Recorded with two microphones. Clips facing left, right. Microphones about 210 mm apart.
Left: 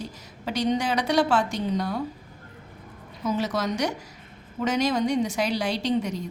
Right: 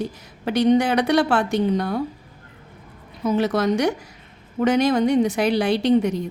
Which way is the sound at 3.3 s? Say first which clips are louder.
Right 6 dB; 60° right (ahead or behind).